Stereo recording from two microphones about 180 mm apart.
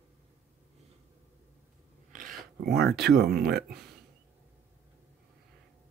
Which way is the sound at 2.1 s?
55° right (ahead or behind).